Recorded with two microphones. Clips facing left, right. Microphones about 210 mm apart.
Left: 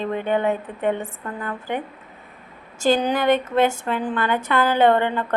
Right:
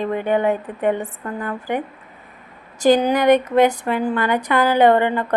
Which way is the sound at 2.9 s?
15° right (ahead or behind).